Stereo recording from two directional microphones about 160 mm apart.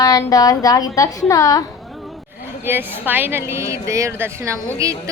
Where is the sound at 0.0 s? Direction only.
20° left (ahead or behind).